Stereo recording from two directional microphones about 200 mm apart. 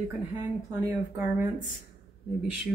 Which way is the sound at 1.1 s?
15° right (ahead or behind).